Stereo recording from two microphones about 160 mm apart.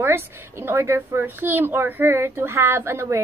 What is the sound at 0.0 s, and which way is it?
A child's voice, 15° right (ahead or behind).